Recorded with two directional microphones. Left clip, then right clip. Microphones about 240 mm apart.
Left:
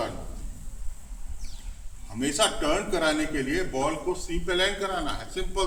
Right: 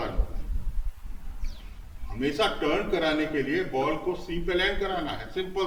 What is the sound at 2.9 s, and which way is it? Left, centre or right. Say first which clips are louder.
Speech: even; centre.